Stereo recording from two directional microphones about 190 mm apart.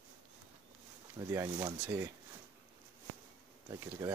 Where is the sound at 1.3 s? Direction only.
15° right (ahead or behind).